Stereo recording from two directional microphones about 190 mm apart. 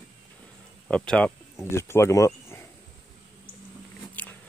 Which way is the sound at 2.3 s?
15° left (ahead or behind).